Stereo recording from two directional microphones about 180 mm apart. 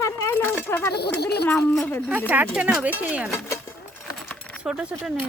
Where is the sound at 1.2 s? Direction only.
65° left (ahead or behind).